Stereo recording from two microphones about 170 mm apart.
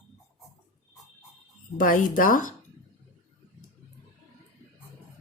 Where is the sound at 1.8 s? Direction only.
50° left (ahead or behind).